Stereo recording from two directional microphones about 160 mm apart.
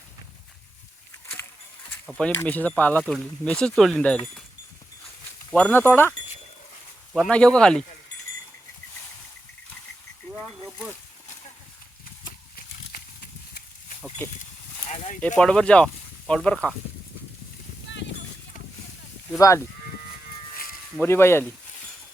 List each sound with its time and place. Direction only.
2.0 s speech: 5° left (ahead or behind)
5.5 s speech: 10° left (ahead or behind)
7.2 s speech: 5° left (ahead or behind)
10.3 s a sound: centre (ahead or behind)
14.8 s a sound: 45° left (ahead or behind)
15.4 s speech: 5° left (ahead or behind)
19.4 s speech: 20° left (ahead or behind)
21.0 s speech: 15° left (ahead or behind)